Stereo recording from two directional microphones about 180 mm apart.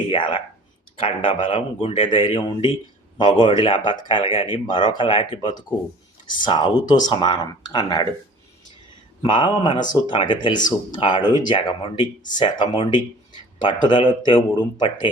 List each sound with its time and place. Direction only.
0.1 s speech: 30° left (ahead or behind)
9.2 s speech: 25° left (ahead or behind)